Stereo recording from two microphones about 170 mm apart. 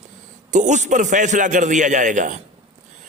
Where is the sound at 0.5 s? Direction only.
45° right (ahead or behind).